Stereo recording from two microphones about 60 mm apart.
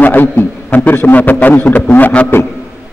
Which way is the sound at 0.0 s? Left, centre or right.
Left.